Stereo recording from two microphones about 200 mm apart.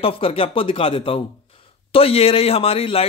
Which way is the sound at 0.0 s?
30° left (ahead or behind).